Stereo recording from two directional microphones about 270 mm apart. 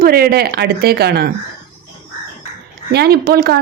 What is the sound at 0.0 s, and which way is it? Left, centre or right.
Speech, right.